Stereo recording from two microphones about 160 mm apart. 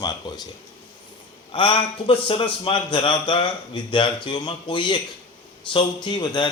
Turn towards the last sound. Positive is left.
turn(degrees=25)  # may be behind; listen again after turning